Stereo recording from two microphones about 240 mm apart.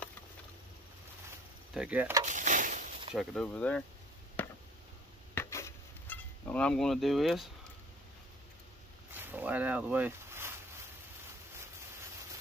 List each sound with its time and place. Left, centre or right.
1.7 s speech: centre
2.2 s a sound: right
3.2 s speech: centre
4.4 s chop: centre
5.3 s insect: centre
9.2 s boat: centre